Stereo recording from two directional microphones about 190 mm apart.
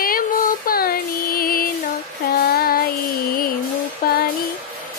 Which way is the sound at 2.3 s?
55° left (ahead or behind).